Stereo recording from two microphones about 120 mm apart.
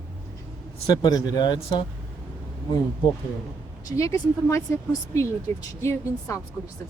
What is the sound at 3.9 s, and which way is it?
A woman's voice, 25° left (ahead or behind).